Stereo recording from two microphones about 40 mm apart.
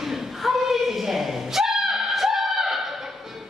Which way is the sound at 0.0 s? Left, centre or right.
Centre.